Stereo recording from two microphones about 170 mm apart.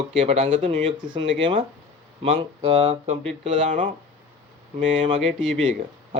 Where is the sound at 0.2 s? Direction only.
35° right (ahead or behind).